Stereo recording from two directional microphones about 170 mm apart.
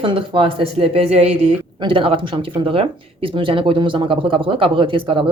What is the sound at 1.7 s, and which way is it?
Speech, 30° right (ahead or behind).